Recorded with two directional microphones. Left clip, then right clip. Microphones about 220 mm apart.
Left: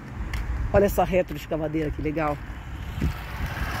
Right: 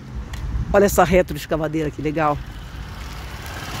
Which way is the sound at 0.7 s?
20° right (ahead or behind).